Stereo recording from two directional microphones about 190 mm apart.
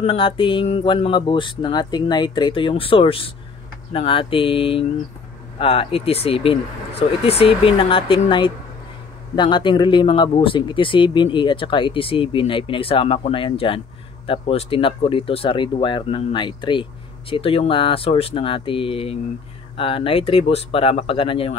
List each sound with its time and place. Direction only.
0.0 s a man's voice: 30° left (ahead or behind)